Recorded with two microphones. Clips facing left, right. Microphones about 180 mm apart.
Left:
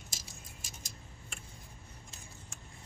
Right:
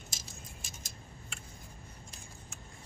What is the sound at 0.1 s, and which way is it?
Keys jangling, 40° left (ahead or behind).